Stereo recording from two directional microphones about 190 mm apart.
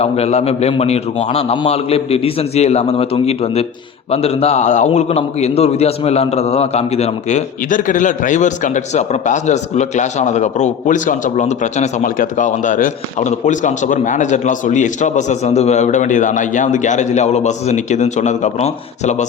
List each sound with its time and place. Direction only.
0.0 s a man's voice: 35° left (ahead or behind)